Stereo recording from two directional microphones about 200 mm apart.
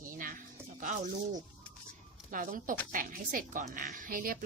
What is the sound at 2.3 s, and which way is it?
Speech, 40° right (ahead or behind).